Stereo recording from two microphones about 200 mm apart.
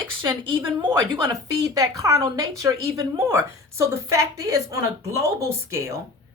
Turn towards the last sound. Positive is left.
turn(degrees=-15)  # may be behind; listen again after turning